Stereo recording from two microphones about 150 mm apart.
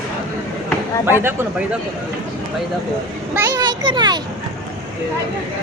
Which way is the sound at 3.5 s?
30° right (ahead or behind).